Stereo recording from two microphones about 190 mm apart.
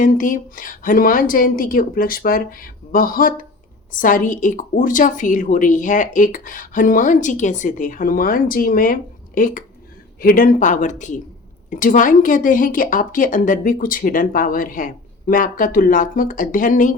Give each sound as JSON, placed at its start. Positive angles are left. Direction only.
{"t": 0.0, "sound": "a woman's voice", "side_deg": 45}